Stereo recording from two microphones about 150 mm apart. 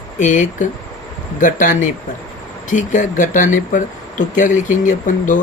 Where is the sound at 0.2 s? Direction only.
55° left (ahead or behind).